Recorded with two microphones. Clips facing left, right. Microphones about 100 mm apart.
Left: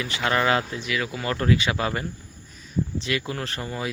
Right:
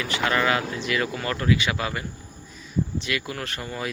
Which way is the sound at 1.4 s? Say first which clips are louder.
Left 1 dB; 35° left (ahead or behind).